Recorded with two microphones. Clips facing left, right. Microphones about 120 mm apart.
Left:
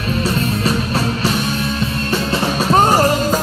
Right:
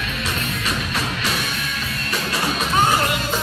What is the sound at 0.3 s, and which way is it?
Music, 30° left (ahead or behind).